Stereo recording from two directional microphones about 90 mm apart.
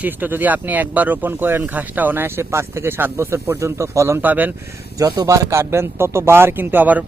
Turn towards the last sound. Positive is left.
turn(degrees=-20)  # may be behind; listen again after turning